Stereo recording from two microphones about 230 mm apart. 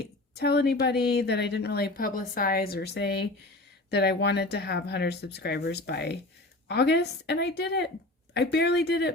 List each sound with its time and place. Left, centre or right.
0.0 s a woman's voice: left